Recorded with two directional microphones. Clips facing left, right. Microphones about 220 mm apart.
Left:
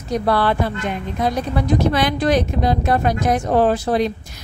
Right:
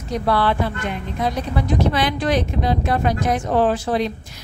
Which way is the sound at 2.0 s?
40° left (ahead or behind).